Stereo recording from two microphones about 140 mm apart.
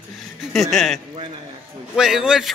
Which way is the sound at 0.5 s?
Centre (ahead or behind).